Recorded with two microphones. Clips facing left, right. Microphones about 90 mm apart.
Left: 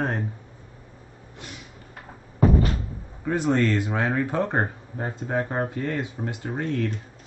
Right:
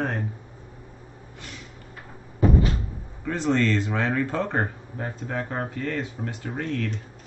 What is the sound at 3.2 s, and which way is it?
Speech, 15° left (ahead or behind).